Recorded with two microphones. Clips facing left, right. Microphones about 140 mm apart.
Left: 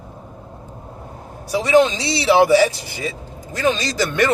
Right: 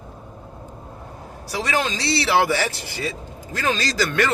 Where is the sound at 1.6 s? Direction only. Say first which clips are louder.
Left 9 dB; 20° left (ahead or behind).